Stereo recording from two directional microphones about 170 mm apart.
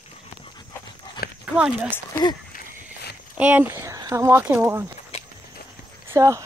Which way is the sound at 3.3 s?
10° right (ahead or behind).